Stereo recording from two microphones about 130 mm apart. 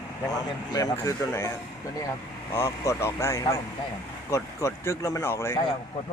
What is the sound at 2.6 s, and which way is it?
Speech, 20° left (ahead or behind).